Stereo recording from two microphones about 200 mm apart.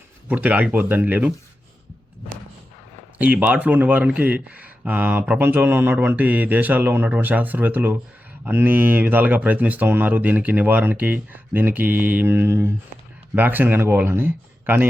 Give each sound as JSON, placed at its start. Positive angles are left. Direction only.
{"t": 0.3, "sound": "speech", "side_deg": -5}
{"t": 3.2, "sound": "speech", "side_deg": -5}